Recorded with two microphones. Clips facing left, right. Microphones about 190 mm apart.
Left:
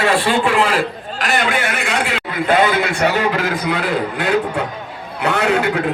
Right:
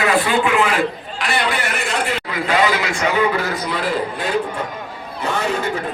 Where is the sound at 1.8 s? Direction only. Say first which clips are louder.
Left 1 dB; 80° left.